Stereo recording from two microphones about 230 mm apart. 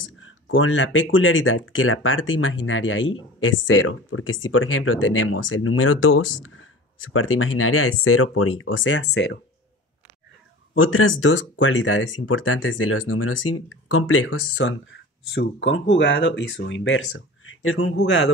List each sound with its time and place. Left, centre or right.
0.0 s speech: left
10.7 s speech: left